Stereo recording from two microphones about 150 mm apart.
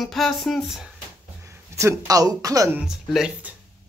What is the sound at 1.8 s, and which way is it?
Speech, 20° right (ahead or behind).